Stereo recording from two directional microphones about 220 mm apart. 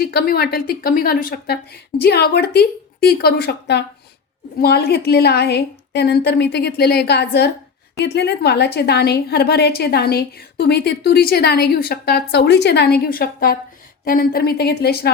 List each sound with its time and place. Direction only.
0.0 s a woman's voice: 45° left (ahead or behind)